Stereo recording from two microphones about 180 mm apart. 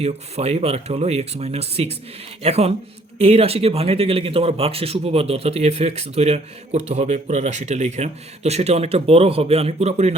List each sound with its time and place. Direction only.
0.0 s speech: 35° right (ahead or behind)